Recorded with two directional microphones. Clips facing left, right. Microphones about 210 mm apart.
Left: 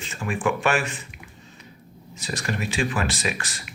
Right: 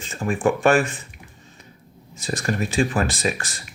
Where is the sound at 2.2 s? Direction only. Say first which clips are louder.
Right 4 dB; 45° right (ahead or behind).